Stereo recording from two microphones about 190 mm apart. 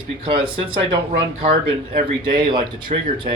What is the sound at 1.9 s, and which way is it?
Speech, 25° right (ahead or behind).